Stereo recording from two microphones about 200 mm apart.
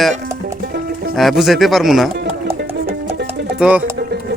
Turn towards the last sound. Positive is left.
turn(degrees=-5)  # may be behind; listen again after turning